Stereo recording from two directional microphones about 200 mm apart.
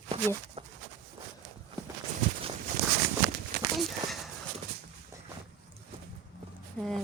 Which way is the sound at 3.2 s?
60° right (ahead or behind).